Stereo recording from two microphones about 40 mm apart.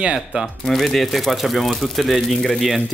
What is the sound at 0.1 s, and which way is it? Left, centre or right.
Speech, centre.